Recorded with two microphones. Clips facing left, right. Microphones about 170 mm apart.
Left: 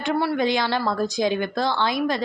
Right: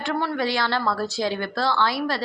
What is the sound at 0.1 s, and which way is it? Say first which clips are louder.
Speech: left 3 dB; 15° left (ahead or behind).